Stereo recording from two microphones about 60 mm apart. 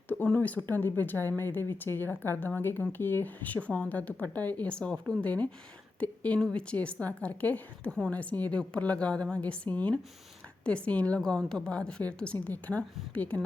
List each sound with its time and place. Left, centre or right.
0.3 s a woman's voice: left